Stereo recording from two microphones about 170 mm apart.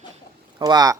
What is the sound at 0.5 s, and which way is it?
Speech, 25° right (ahead or behind).